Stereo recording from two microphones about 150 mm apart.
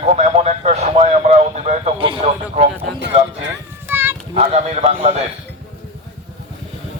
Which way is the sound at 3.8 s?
15° right (ahead or behind).